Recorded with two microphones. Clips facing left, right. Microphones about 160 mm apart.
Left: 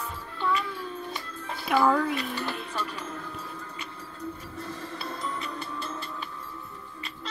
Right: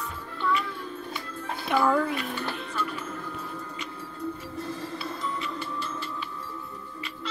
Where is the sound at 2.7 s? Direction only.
40° left (ahead or behind).